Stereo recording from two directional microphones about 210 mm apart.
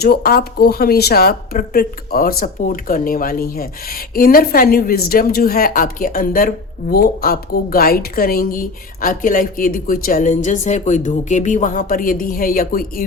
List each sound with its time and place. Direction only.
0.0 s speech: 45° left (ahead or behind)